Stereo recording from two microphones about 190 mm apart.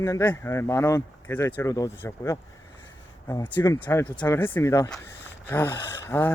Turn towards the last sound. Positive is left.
turn(degrees=10)  # may be behind; listen again after turning